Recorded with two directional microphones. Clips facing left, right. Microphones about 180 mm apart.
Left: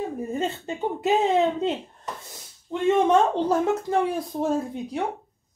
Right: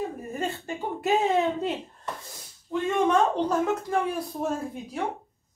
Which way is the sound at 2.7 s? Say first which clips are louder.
Even; 25° left (ahead or behind).